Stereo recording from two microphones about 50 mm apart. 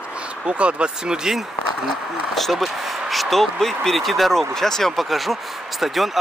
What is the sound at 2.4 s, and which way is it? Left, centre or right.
Speech, centre.